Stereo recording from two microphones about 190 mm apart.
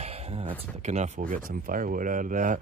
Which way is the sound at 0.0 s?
30° right (ahead or behind).